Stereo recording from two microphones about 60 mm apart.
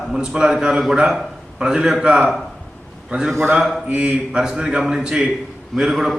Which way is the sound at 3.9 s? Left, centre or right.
Centre.